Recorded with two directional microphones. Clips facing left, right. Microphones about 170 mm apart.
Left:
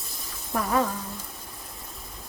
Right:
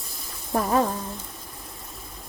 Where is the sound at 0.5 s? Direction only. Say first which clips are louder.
Right 3 dB; 30° right (ahead or behind).